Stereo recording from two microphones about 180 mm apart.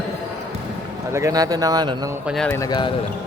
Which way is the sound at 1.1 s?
20° right (ahead or behind).